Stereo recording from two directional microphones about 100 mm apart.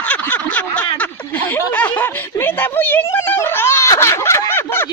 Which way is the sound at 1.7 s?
20° left (ahead or behind).